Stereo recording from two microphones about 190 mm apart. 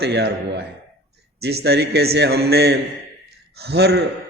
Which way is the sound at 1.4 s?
60° right (ahead or behind).